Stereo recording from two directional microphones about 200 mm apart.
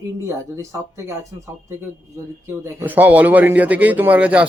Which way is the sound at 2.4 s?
10° right (ahead or behind).